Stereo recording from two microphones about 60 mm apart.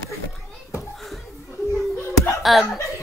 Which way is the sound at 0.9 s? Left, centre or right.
Centre.